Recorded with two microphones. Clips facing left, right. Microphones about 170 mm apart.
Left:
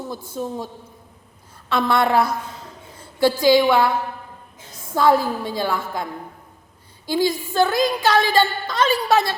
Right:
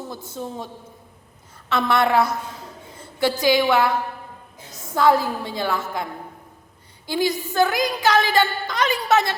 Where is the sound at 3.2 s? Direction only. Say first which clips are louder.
Left 3 dB; 20° right (ahead or behind).